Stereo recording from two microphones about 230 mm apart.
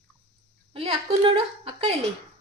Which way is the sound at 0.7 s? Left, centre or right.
Right.